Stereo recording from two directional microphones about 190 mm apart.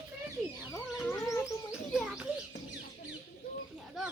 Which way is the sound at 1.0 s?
15° left (ahead or behind).